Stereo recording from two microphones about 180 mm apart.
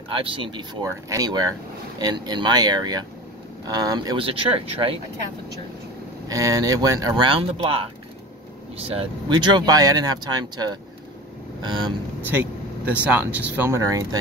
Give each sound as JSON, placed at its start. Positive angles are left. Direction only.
{"t": 0.1, "sound": "speech", "side_deg": -30}
{"t": 6.2, "sound": "speech", "side_deg": -20}
{"t": 12.3, "sound": "speech", "side_deg": -10}